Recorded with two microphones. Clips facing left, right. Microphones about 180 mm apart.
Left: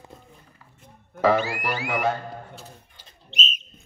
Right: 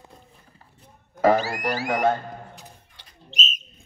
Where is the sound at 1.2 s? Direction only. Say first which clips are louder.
Right 1 dB; 40° right (ahead or behind).